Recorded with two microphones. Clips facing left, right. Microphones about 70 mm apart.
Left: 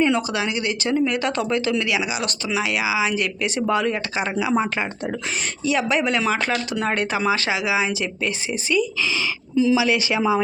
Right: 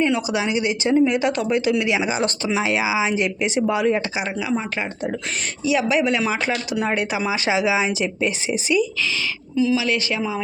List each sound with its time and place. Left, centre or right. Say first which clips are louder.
0.3 s speech: right 2 dB; right
2.0 s speech: right 4 dB; right; by 3.9 s centre
4.2 s speech: left 2 dB; centre
5.6 s speech: right 2 dB; centre
9.6 s speech: left 2 dB; left
9.8 s speech: left 2 dB; centre